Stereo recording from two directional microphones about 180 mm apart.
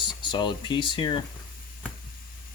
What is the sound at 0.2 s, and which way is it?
Speech, 25° left (ahead or behind).